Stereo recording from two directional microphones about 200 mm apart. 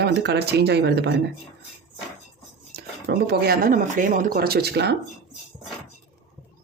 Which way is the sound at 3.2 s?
50° right (ahead or behind).